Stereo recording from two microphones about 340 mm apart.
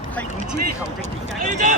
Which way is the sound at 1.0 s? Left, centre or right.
Centre.